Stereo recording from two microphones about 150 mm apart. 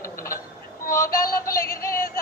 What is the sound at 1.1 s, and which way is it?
Synthetic singing, 80° left.